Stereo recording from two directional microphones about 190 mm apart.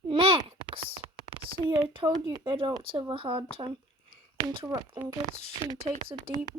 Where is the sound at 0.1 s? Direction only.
25° right (ahead or behind).